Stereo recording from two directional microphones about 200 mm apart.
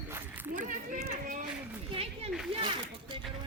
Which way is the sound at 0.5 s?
40° right (ahead or behind).